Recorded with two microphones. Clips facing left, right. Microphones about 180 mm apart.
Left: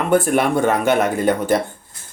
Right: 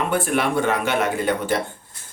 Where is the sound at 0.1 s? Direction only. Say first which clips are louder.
Left 5 dB; 45° left (ahead or behind).